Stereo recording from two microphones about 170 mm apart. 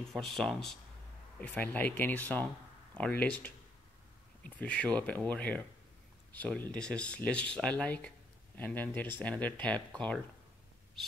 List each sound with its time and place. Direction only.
0.1 s speech: centre (ahead or behind)